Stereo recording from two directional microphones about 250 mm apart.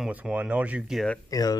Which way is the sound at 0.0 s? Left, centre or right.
Centre.